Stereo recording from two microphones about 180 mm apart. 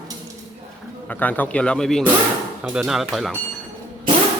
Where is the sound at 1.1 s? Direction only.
10° left (ahead or behind).